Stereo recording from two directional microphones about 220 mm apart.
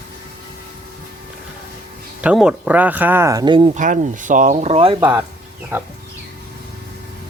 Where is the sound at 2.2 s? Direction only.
5° right (ahead or behind); by 3.7 s 20° right (ahead or behind).